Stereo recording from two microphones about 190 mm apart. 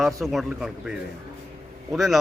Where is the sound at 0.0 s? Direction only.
Centre (ahead or behind).